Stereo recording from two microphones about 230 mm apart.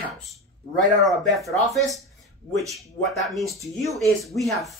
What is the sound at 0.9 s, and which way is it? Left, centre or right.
Speech, centre.